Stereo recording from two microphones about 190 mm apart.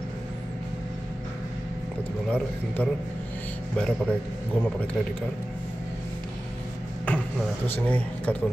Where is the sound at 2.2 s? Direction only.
5° left (ahead or behind).